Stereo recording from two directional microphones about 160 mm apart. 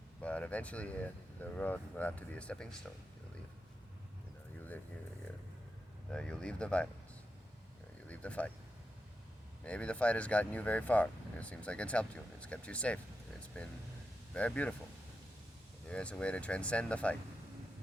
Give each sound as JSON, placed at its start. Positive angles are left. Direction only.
{"t": 0.2, "sound": "speech", "side_deg": 10}
{"t": 6.1, "sound": "speech", "side_deg": 5}
{"t": 8.0, "sound": "a sound", "side_deg": 10}
{"t": 9.6, "sound": "speech", "side_deg": 5}
{"t": 15.9, "sound": "speech", "side_deg": 5}